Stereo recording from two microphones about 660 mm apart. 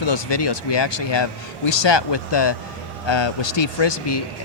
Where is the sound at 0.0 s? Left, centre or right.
Left.